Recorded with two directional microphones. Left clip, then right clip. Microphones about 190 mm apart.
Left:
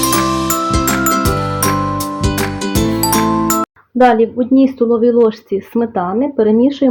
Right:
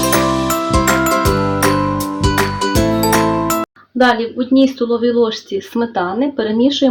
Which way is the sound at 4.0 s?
40° left (ahead or behind).